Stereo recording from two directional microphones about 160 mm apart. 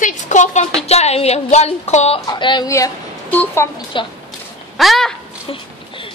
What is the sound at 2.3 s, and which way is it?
A woman's voice, 30° left (ahead or behind).